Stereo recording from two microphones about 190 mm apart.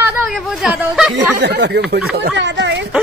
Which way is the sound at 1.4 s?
60° right (ahead or behind).